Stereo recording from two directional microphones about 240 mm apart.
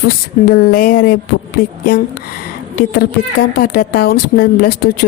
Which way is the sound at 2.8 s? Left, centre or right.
Left.